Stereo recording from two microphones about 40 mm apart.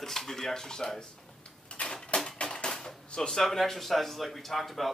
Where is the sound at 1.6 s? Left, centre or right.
Left.